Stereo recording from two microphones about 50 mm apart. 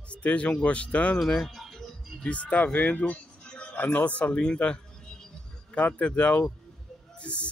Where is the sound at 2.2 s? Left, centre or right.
Left.